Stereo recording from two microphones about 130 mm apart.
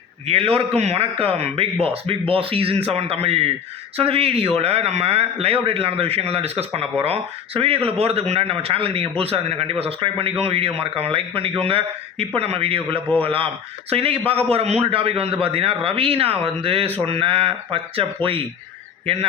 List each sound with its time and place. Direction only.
0.3 s speech: 50° right (ahead or behind)